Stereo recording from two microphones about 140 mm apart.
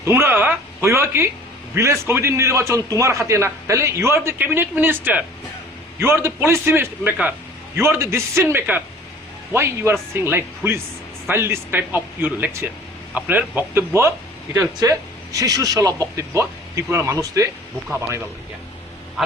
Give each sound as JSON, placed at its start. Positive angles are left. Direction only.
{"t": 0.0, "sound": "a man's voice", "side_deg": -15}